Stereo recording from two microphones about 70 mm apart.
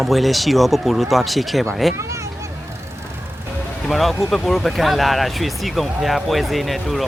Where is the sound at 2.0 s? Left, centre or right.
Right.